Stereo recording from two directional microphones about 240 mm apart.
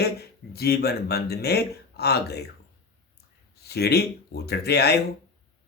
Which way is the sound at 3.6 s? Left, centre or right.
Left.